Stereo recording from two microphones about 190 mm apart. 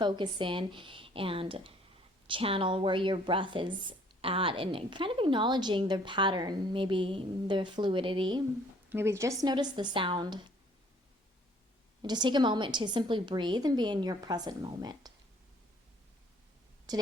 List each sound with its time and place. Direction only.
0.0 s speech: 25° right (ahead or behind)
8.9 s speech: 15° right (ahead or behind)
12.0 s speech: 25° right (ahead or behind)
16.9 s a woman's voice: 20° right (ahead or behind)